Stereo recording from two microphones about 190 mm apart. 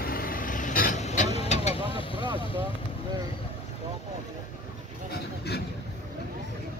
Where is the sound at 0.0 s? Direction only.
50° left (ahead or behind); by 2.3 s 25° left (ahead or behind).